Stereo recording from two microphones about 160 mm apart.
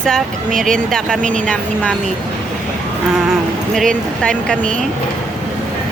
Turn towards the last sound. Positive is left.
turn(degrees=5)  # may be behind; listen again after turning